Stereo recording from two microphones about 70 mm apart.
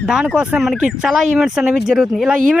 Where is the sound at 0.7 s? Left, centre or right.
Centre.